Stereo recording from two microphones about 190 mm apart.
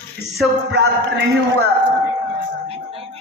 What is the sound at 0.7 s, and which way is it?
Speech, 65° right (ahead or behind).